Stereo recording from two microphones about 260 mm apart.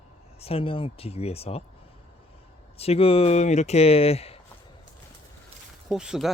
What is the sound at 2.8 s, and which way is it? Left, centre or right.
Speech, left.